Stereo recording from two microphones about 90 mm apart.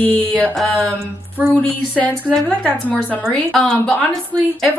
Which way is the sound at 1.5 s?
20° left (ahead or behind).